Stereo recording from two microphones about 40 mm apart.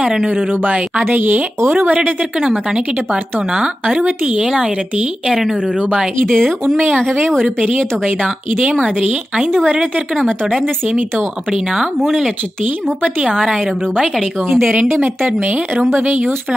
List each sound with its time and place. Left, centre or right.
0.3 s speech: right
1.0 s speech: right
1.7 s speech: right
2.4 s speech: right
6.2 s speech: centre
7.7 s speech: right
9.7 s speech: right
11.5 s a woman's voice: centre
13.4 s a woman's voice: centre
14.7 s speech: right